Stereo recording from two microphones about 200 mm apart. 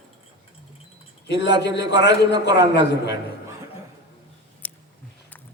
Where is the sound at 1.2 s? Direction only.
60° left (ahead or behind).